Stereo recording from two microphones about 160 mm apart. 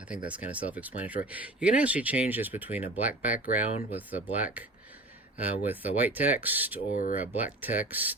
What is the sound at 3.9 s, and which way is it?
Speech, 10° right (ahead or behind).